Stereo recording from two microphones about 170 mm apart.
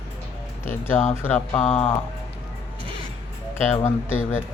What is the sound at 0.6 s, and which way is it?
Speech, 10° left (ahead or behind).